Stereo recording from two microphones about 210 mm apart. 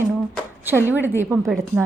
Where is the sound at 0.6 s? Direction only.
10° right (ahead or behind).